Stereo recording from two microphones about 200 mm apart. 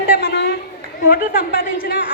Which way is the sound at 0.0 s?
60° left (ahead or behind).